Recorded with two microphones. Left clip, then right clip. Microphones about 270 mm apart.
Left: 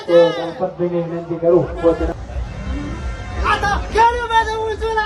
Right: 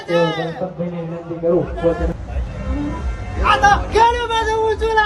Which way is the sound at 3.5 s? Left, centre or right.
Centre.